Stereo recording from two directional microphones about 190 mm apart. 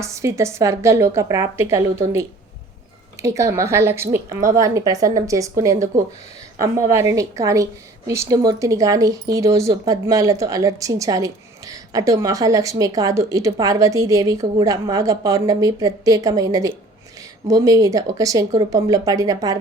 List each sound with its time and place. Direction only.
0.0 s speech: 15° right (ahead or behind)
6.6 s speech: 15° right (ahead or behind)